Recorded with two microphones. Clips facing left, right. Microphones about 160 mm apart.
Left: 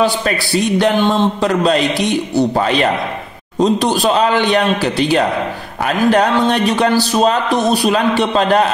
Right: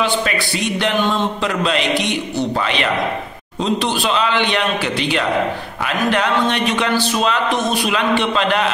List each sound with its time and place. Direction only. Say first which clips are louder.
0.0 s a man's voice: left 3 dB; 35° left (ahead or behind)